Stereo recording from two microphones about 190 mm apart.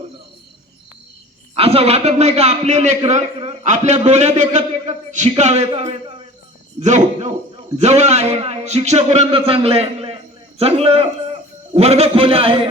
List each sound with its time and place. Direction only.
1.5 s a man's voice: 30° right (ahead or behind)